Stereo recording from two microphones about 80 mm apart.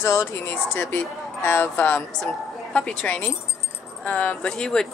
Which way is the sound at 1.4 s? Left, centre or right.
Left.